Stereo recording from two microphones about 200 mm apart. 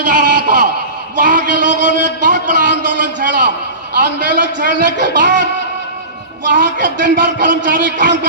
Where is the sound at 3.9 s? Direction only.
55° right (ahead or behind).